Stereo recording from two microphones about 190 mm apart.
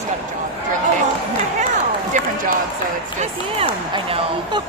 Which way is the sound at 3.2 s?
30° right (ahead or behind).